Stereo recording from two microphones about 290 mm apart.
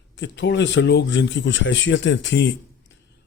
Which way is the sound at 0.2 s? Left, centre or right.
Left.